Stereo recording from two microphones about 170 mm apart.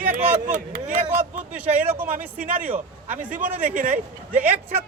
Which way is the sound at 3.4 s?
50° right (ahead or behind).